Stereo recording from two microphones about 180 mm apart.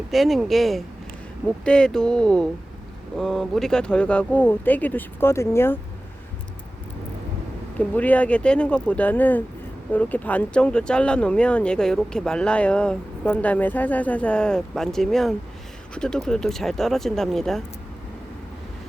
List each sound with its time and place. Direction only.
0.1 s speech: centre (ahead or behind)
7.8 s speech: 10° left (ahead or behind)